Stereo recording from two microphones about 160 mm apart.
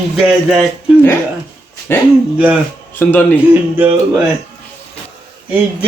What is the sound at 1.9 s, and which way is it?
Speech, 15° left (ahead or behind).